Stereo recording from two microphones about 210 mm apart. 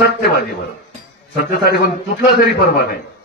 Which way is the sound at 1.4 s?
50° left (ahead or behind).